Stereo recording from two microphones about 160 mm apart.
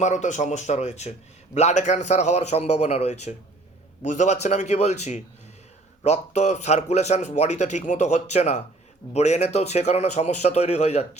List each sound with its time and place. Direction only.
0.0 s a man's voice: 50° left (ahead or behind)